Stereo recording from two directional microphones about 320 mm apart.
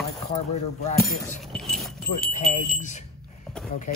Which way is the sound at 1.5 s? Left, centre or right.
Centre.